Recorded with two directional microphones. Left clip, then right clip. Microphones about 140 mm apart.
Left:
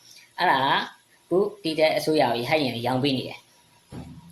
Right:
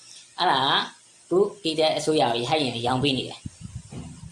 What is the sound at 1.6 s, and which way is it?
Speech, 10° left (ahead or behind).